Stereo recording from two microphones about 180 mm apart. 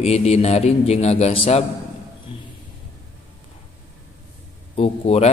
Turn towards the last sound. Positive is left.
turn(degrees=35)  # may be behind; listen again after turning